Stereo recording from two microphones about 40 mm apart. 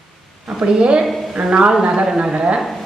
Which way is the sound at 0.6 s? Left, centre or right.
Right.